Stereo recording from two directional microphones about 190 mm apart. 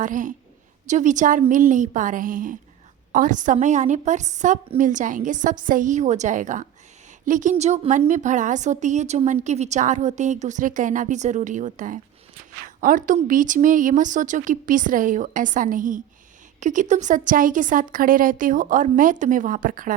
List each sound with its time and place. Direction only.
0.0 s a woman's voice: 45° right (ahead or behind)